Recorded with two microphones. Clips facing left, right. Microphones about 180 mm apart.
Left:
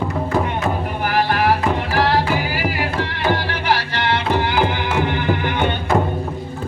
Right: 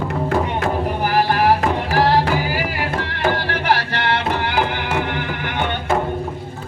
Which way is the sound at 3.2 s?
55° right (ahead or behind).